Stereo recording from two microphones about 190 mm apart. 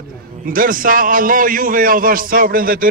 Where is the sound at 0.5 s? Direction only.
45° right (ahead or behind).